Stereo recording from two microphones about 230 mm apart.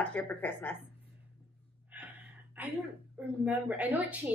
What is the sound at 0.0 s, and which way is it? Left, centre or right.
Speech, centre.